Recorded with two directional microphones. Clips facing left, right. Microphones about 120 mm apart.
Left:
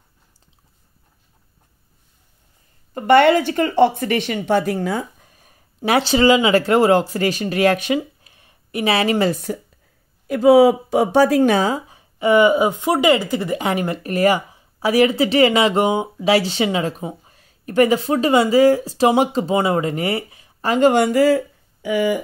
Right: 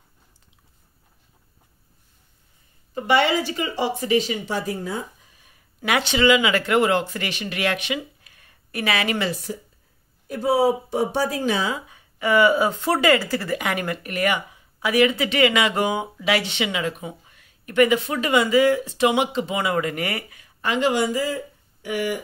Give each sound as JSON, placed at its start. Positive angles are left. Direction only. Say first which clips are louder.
{"t": 2.9, "sound": "speech", "louder": "left 7 dB", "side_deg": 55}
{"t": 5.2, "sound": "a sound", "louder": "left 4 dB", "side_deg": 45}
{"t": 5.8, "sound": "speech", "louder": "left 5 dB", "side_deg": 30}
{"t": 8.2, "sound": "a sound", "louder": "left 2 dB", "side_deg": 25}
{"t": 9.3, "sound": "speech", "louder": "left 6 dB", "side_deg": 50}
{"t": 10.2, "sound": "speech", "louder": "left 8 dB", "side_deg": 90}
{"t": 11.7, "sound": "speech", "louder": "left 6 dB", "side_deg": 30}
{"t": 20.7, "sound": "speech", "louder": "left 7 dB", "side_deg": 50}